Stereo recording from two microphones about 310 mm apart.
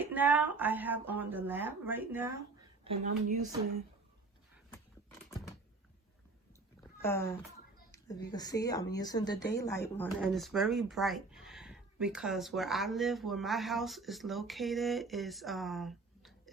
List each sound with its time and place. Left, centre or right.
0.0 s speech: centre
2.8 s speech: right
7.0 s speech: centre